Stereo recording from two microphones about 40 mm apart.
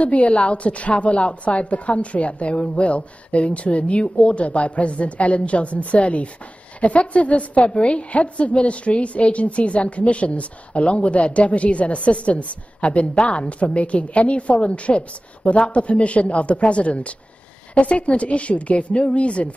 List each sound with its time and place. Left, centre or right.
0.0 s a woman's voice: left